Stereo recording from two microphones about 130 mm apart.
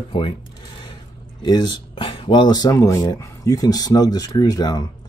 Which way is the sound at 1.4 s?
35° left (ahead or behind).